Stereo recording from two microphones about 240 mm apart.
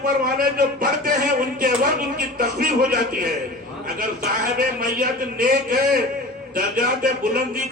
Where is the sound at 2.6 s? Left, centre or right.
Right.